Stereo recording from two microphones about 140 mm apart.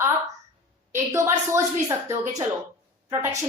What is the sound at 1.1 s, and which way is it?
Speech, 20° right (ahead or behind).